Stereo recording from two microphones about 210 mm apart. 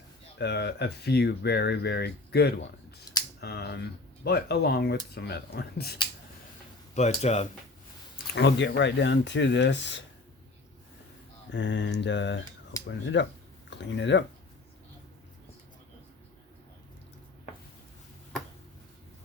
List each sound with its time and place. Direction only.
0.3 s speech: 50° left (ahead or behind)
6.9 s speech: 30° left (ahead or behind)
8.3 s speech: 55° left (ahead or behind)
11.5 s speech: 60° left (ahead or behind)